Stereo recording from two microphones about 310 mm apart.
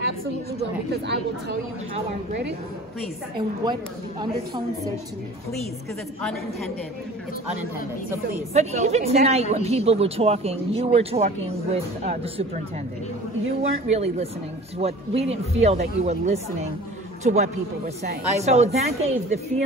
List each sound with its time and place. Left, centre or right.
0.9 s speech: right
8.5 s a woman's voice: right
13.6 s a woman's voice: right